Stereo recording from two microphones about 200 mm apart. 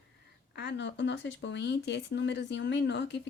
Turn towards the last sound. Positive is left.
turn(degrees=60)  # may be behind; listen again after turning